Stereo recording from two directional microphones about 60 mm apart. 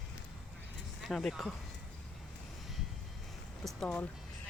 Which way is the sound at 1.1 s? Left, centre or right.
Centre.